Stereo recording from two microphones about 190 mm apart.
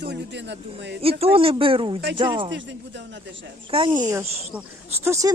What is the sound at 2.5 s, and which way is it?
Speech, 70° right (ahead or behind).